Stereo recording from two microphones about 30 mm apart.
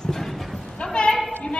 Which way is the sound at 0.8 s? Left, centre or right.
Left.